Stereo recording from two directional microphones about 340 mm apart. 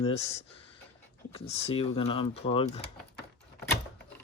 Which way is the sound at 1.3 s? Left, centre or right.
Centre.